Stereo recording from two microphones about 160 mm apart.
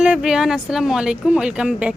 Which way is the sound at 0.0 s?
5° right (ahead or behind).